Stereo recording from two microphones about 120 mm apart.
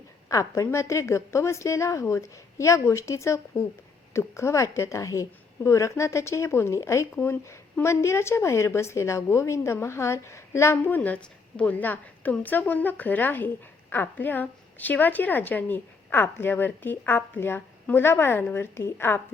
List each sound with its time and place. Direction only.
0.3 s a woman's voice: 25° left (ahead or behind)